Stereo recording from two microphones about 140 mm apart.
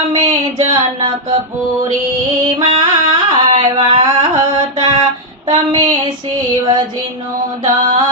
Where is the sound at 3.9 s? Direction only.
35° right (ahead or behind).